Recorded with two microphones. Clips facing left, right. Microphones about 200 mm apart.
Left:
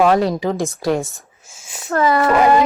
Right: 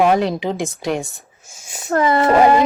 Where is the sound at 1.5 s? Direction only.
40° right (ahead or behind).